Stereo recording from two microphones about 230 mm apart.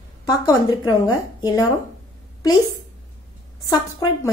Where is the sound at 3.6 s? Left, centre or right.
Centre.